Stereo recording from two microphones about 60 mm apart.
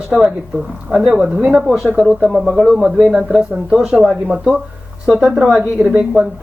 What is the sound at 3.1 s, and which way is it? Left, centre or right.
Speech, centre.